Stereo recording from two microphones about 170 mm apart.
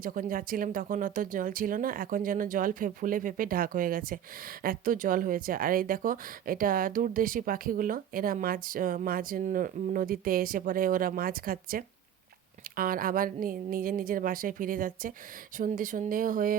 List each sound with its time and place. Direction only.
0.0 s speech: 55° right (ahead or behind)